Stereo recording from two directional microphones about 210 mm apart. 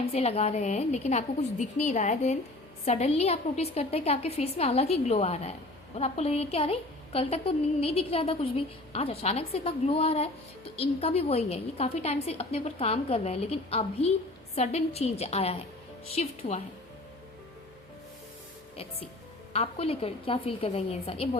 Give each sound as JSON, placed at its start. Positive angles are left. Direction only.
{"t": 0.0, "sound": "a woman's voice", "side_deg": 30}
{"t": 19.5, "sound": "a woman's voice", "side_deg": 25}